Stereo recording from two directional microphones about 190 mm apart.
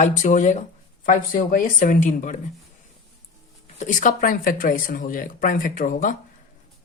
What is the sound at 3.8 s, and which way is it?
Speech, 40° left (ahead or behind).